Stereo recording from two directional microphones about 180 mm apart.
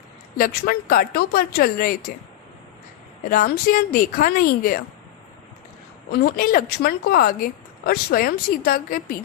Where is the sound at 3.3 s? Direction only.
55° left (ahead or behind).